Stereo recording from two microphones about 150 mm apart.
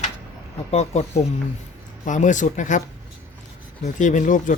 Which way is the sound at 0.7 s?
45° left (ahead or behind).